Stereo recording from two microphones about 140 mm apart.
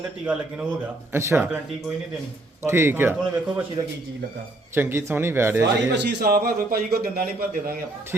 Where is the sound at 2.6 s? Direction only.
15° right (ahead or behind).